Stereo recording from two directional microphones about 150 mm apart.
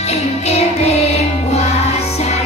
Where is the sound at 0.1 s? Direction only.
45° left (ahead or behind).